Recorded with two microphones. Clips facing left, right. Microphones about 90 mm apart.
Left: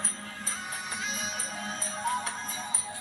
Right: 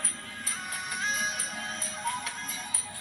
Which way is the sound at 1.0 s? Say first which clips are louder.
Right 7 dB; 45° right (ahead or behind).